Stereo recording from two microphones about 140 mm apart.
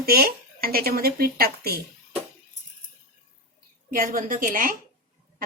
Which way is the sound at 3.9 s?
80° right.